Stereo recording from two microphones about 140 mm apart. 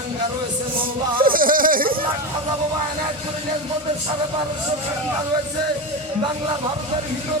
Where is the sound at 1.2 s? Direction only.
90° right.